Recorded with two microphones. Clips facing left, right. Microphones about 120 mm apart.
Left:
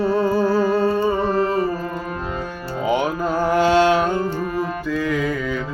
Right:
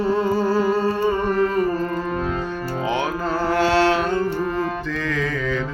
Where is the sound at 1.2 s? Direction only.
35° left (ahead or behind).